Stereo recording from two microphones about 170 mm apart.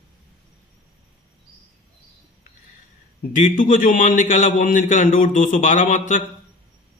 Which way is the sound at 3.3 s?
50° left (ahead or behind).